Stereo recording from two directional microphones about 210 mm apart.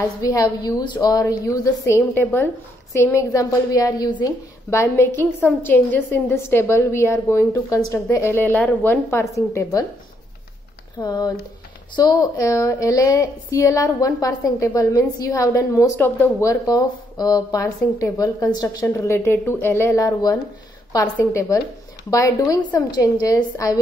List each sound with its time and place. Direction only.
0.2 s a woman's voice: 15° left (ahead or behind)
11.0 s a woman's voice: 20° left (ahead or behind)